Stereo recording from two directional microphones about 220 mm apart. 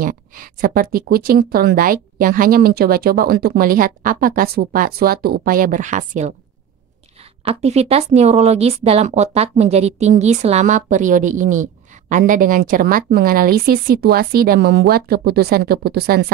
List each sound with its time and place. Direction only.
0.0 s speech: 40° right (ahead or behind)
7.4 s speech: 30° right (ahead or behind); by 16.3 s 45° right (ahead or behind)